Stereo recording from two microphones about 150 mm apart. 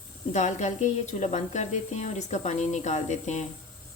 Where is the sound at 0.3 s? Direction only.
50° left (ahead or behind).